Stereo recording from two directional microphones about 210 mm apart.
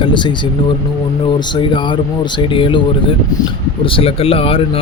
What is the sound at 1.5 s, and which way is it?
Speech, 25° left (ahead or behind).